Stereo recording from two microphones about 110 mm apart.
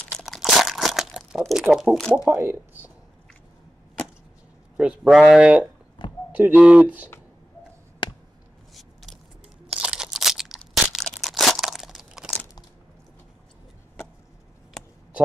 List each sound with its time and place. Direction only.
0.2 s crunch: centre (ahead or behind)
1.4 s speech: centre (ahead or behind)
2.2 s speech: 20° right (ahead or behind)
4.7 s speech: 5° right (ahead or behind)
6.0 s clip-clop: 45° left (ahead or behind)
6.3 s speech: 15° right (ahead or behind)
8.7 s biting: centre (ahead or behind)
9.7 s a sound: 5° right (ahead or behind)